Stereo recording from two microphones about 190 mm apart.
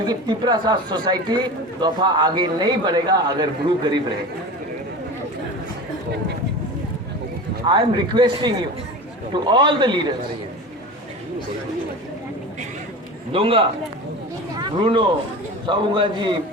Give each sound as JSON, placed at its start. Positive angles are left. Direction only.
{"t": 0.0, "sound": "speech", "side_deg": -20}
{"t": 7.7, "sound": "speech", "side_deg": -25}
{"t": 13.3, "sound": "speech", "side_deg": -30}
{"t": 14.5, "sound": "a sound", "side_deg": -25}
{"t": 15.6, "sound": "speech", "side_deg": -25}